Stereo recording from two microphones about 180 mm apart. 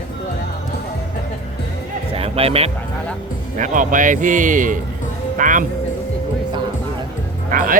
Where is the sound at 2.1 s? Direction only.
35° right (ahead or behind).